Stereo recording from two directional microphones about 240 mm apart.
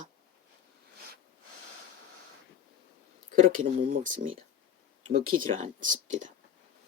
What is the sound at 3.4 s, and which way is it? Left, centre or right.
Speech, right.